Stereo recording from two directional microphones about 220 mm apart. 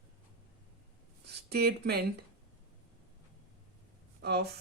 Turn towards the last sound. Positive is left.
turn(degrees=-45)  # may be behind; listen again after turning